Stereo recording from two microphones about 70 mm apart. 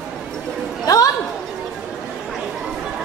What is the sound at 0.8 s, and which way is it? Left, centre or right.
Chatter, left.